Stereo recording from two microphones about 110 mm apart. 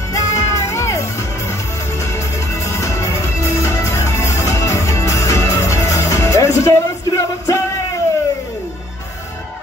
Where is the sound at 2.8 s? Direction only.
25° left (ahead or behind).